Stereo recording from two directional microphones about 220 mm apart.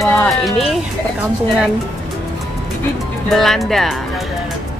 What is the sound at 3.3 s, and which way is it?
Speech, centre (ahead or behind).